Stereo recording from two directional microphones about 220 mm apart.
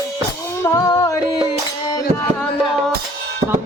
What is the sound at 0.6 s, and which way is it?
Music, 15° left (ahead or behind).